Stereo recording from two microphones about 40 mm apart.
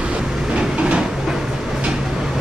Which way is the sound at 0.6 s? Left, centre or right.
Right.